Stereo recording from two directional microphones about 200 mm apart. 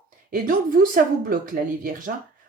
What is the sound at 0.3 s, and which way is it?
Speech, 45° right (ahead or behind).